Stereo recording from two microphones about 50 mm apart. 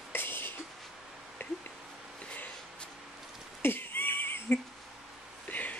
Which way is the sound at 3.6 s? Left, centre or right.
Left.